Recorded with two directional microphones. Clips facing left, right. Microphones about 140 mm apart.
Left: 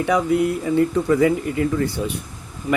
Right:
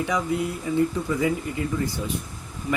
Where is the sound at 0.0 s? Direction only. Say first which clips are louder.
Left 7 dB; 60° left (ahead or behind).